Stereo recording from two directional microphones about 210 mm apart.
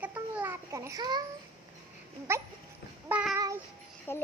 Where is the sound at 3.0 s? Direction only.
5° right (ahead or behind).